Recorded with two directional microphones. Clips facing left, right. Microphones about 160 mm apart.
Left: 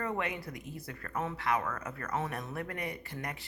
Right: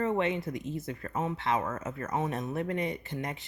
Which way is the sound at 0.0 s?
25° right (ahead or behind).